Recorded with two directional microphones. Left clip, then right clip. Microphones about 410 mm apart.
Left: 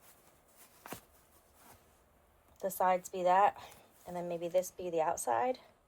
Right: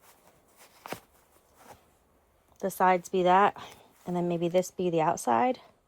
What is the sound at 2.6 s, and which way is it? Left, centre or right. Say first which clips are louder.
A woman's voice: right 6 dB; right.